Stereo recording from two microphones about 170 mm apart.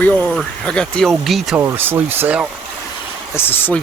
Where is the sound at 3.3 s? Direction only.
15° left (ahead or behind).